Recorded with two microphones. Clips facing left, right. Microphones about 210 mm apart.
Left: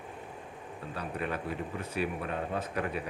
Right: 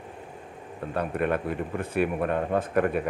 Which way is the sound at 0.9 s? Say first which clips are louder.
Right 9 dB; 55° right (ahead or behind).